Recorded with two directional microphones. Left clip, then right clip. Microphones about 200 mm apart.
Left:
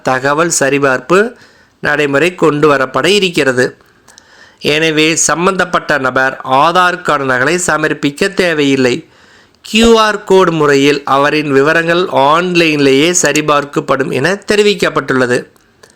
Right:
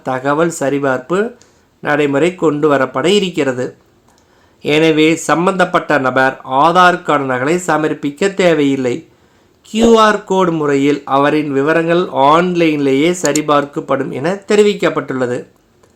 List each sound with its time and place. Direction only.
0.0 s speech: 20° left (ahead or behind)